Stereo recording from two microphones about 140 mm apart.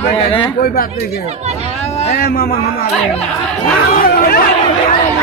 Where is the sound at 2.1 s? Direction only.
90° left.